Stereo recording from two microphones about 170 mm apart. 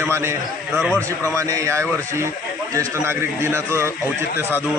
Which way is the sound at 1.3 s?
20° right (ahead or behind).